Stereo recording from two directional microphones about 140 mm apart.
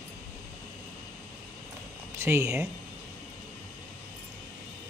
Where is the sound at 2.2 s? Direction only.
20° right (ahead or behind).